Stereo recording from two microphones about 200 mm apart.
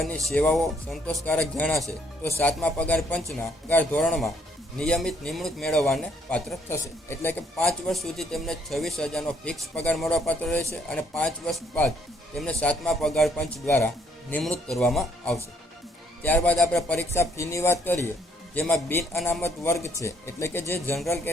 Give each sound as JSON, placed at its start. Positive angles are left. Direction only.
{"t": 0.3, "sound": "speech", "side_deg": 5}
{"t": 17.2, "sound": "speech", "side_deg": 15}